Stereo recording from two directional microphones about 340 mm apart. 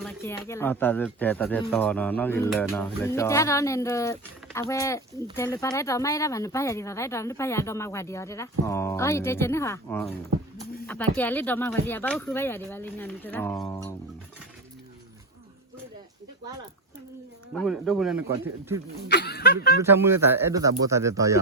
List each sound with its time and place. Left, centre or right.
0.0 s speech: centre
17.5 s speech: centre
19.0 s a sound: left
19.8 s speech: centre